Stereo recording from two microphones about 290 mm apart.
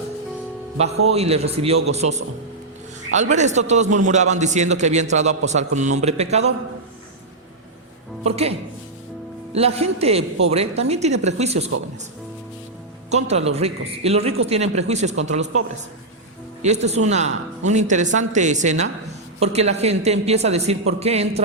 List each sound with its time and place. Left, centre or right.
1.0 s a man's voice: right
8.2 s a man's voice: right
9.6 s a man's voice: right
13.1 s a man's voice: right
16.6 s a man's voice: right